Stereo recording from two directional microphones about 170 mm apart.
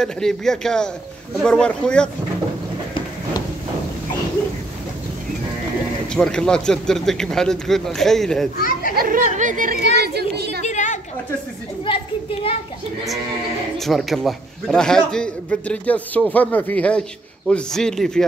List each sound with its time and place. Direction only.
0.0 s a man's voice: 5° left (ahead or behind)
6.1 s a man's voice: 5° left (ahead or behind)
8.5 s speech: 55° left (ahead or behind)
8.9 s speech: 55° right (ahead or behind)
9.9 s a woman's voice: 70° right (ahead or behind)
10.6 s a sound: 45° left (ahead or behind)
11.8 s speech: 30° left (ahead or behind)
13.7 s a man's voice: centre (ahead or behind)